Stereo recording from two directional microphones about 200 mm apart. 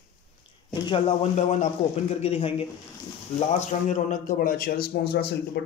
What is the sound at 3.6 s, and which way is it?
A man's voice, 40° left (ahead or behind).